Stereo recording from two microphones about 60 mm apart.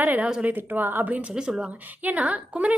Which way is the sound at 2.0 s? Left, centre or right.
Right.